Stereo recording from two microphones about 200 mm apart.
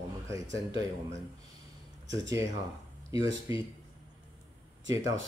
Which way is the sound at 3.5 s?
15° right (ahead or behind).